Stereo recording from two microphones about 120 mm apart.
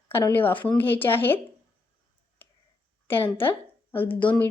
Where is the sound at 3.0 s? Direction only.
20° left (ahead or behind).